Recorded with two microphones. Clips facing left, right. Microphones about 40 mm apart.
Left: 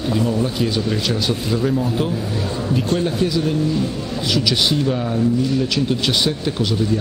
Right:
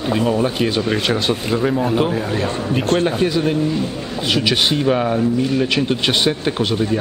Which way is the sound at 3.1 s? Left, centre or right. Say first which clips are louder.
Right 2 dB; right.